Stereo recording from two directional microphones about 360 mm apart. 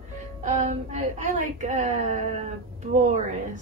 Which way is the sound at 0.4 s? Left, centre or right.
Centre.